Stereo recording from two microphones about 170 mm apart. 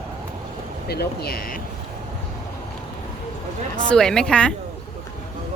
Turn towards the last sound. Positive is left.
turn(degrees=5)  # may be behind; listen again after turning